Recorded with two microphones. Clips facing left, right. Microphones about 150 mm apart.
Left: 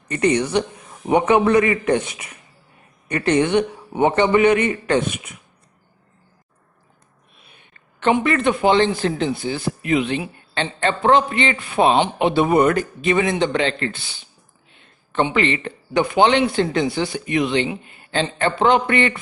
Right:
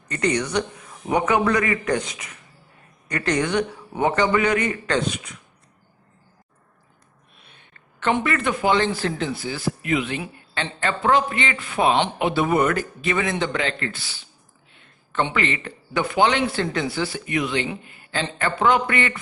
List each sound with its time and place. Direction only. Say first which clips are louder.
0.1 s a man's voice: left 4 dB; 20° left (ahead or behind)
8.0 s a man's voice: left 4 dB; 25° left (ahead or behind)
15.3 s a man's voice: left 5 dB; 25° left (ahead or behind)